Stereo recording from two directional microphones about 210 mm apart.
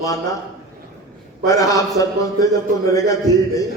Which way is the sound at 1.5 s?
15° left (ahead or behind).